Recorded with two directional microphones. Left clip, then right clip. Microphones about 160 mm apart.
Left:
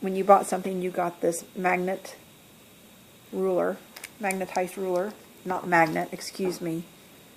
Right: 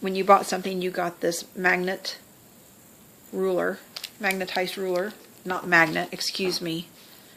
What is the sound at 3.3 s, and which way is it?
Speech, 30° right (ahead or behind).